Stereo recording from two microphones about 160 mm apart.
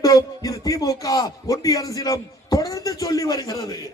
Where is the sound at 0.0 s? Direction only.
20° left (ahead or behind).